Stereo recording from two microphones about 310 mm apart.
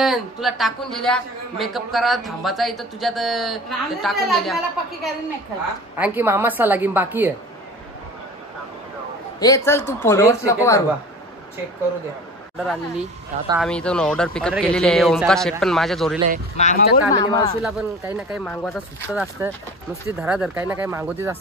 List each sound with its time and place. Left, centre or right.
0.0 s a man's voice: centre
5.9 s a woman's voice: centre
9.4 s speech: centre
12.5 s a man's voice: centre
16.5 s speech: left
17.6 s a man's voice: centre